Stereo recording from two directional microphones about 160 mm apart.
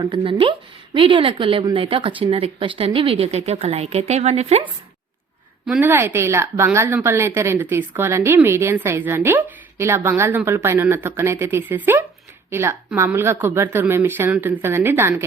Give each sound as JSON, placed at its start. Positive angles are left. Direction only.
{"t": 0.0, "sound": "speech", "side_deg": -30}
{"t": 5.8, "sound": "a woman's voice", "side_deg": -10}